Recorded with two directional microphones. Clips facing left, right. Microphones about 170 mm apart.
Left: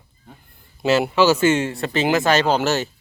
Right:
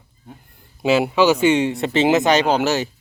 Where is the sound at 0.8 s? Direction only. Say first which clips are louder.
Right 1 dB; 10° right (ahead or behind).